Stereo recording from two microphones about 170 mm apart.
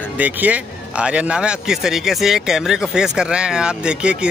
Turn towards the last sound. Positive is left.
turn(degrees=-5)  # may be behind; listen again after turning